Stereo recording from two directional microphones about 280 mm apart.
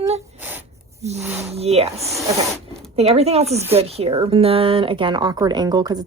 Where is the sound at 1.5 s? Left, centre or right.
Right.